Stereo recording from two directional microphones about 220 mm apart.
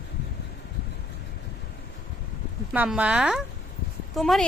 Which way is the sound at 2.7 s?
5° right (ahead or behind).